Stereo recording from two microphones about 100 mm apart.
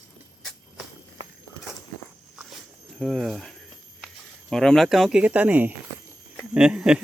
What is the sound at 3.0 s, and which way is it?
Speech, centre (ahead or behind).